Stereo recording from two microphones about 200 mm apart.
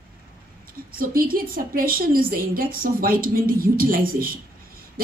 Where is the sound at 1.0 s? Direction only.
45° right (ahead or behind).